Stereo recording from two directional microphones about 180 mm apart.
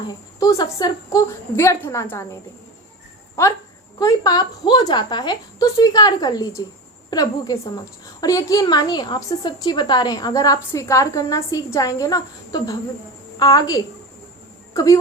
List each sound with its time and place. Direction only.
0.1 s a woman's voice: 20° left (ahead or behind)
4.0 s a woman's voice: 20° left (ahead or behind)